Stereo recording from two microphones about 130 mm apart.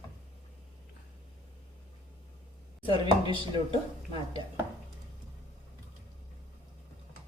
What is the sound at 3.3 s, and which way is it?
Speech, 40° left (ahead or behind).